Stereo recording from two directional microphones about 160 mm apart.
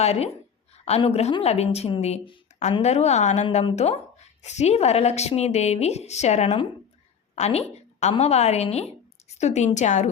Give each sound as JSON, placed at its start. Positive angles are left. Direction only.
{"t": 0.0, "sound": "a woman's voice", "side_deg": 40}
{"t": 7.3, "sound": "a sound", "side_deg": 45}
{"t": 8.1, "sound": "a woman's voice", "side_deg": 40}